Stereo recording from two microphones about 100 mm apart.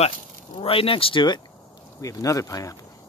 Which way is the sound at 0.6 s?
65° left (ahead or behind).